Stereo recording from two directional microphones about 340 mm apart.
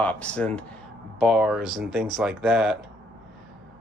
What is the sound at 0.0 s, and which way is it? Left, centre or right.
Speech, centre.